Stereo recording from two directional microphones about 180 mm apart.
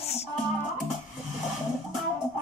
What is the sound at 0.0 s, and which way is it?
Music, 35° left (ahead or behind).